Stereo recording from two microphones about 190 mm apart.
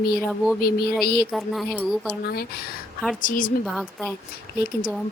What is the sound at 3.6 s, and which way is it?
Speech, centre (ahead or behind).